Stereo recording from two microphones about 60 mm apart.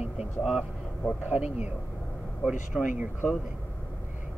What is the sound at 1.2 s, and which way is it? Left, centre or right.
Speech, right.